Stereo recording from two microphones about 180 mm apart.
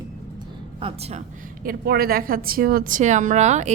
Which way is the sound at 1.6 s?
60° right (ahead or behind).